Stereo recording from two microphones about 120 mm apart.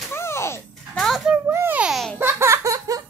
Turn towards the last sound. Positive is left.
turn(degrees=-30)  # may be behind; listen again after turning